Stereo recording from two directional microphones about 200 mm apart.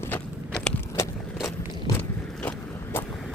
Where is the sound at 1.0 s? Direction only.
15° left (ahead or behind).